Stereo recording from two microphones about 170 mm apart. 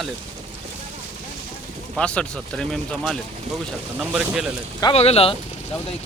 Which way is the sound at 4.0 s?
5° right (ahead or behind).